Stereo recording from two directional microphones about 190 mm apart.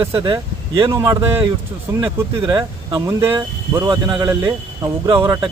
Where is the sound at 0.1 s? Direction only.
25° right (ahead or behind).